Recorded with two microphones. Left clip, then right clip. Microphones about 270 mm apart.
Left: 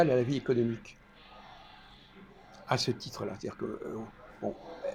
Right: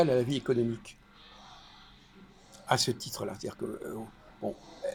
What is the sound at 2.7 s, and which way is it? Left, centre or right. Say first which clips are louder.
Speech: right 3 dB; right.